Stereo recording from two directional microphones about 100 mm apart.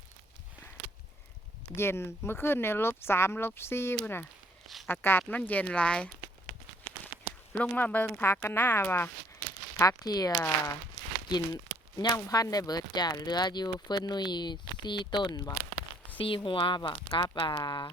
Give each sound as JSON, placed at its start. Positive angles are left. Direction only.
{"t": 1.7, "sound": "speech", "side_deg": 25}
{"t": 4.6, "sound": "a sound", "side_deg": 0}
{"t": 4.9, "sound": "speech", "side_deg": 20}
{"t": 7.6, "sound": "speech", "side_deg": 15}
{"t": 9.8, "sound": "speech", "side_deg": 40}
{"t": 16.1, "sound": "speech", "side_deg": 60}